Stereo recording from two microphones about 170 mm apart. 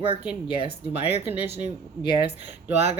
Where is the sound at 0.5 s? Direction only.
65° left (ahead or behind).